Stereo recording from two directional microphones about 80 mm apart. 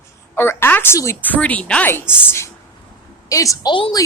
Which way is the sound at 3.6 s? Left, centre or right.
Left.